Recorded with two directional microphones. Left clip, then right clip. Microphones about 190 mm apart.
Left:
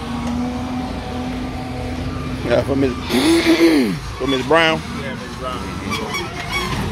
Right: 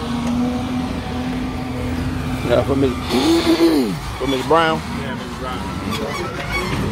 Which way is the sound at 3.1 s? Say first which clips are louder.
Left 2 dB; 20° left (ahead or behind).